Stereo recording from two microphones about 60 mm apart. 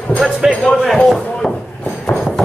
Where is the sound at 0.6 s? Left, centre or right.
Centre.